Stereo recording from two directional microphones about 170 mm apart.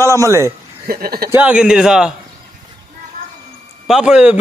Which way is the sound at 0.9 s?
65° right (ahead or behind).